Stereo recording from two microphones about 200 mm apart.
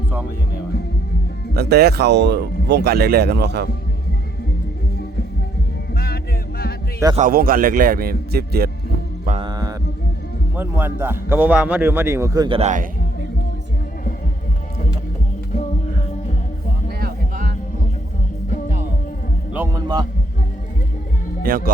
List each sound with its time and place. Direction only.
1.5 s speech: 50° right (ahead or behind)
7.2 s speech: 45° right (ahead or behind)
9.4 s mantra: 20° right (ahead or behind)
10.5 s a man's voice: 10° right (ahead or behind)
12.5 s a man's voice: 35° right (ahead or behind)
17.0 s heart sounds: 45° right (ahead or behind)
19.5 s speech: 15° right (ahead or behind)
21.4 s speech: 45° right (ahead or behind)